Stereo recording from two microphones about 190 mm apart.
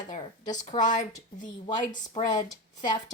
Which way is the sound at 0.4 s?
40° left (ahead or behind).